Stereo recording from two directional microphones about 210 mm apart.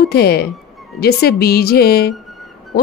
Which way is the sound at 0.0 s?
45° left (ahead or behind).